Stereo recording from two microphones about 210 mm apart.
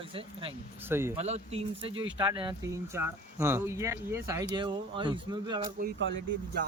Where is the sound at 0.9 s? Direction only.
10° right (ahead or behind).